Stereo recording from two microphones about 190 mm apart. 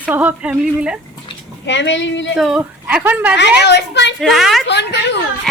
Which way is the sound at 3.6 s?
65° left (ahead or behind).